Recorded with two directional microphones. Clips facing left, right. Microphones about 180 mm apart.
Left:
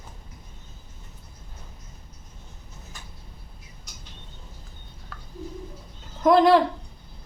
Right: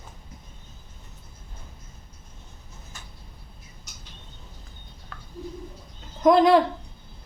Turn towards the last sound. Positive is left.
turn(degrees=0)  # may be behind; listen again after turning